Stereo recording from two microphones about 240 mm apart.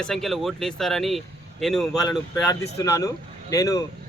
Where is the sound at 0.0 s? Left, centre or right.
Centre.